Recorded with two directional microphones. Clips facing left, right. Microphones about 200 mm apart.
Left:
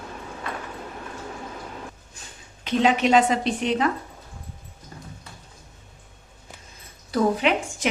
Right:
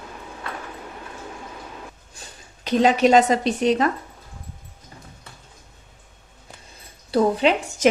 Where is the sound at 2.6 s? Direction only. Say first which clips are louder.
Right 3 dB; 40° right (ahead or behind).